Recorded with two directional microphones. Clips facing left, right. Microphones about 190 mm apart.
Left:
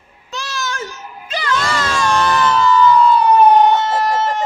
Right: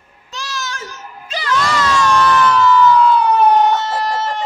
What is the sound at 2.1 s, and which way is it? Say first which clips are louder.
Crowd: right 1 dB; 30° left (ahead or behind).